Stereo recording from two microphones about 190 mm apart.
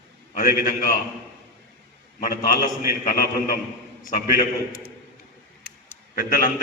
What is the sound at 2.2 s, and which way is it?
Speech, 45° left (ahead or behind).